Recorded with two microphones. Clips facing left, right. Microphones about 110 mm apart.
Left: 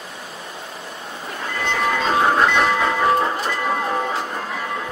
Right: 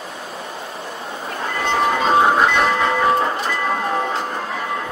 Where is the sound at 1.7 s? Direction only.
25° right (ahead or behind).